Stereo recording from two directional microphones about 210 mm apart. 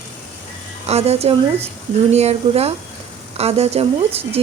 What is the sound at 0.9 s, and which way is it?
Speech, 30° right (ahead or behind).